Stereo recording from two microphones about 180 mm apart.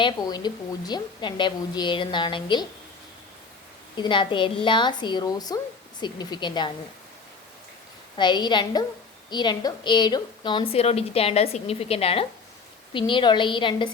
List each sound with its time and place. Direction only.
0.0 s a woman's voice: 25° left (ahead or behind)
3.9 s a woman's voice: 25° left (ahead or behind)
8.1 s a woman's voice: 25° left (ahead or behind)